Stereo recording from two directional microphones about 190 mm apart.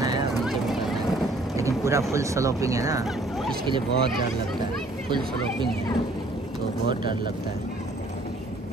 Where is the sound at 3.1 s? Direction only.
Centre (ahead or behind).